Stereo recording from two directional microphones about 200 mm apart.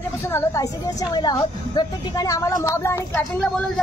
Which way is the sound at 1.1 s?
20° left (ahead or behind).